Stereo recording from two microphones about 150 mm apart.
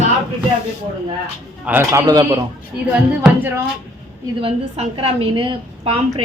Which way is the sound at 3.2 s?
15° right (ahead or behind).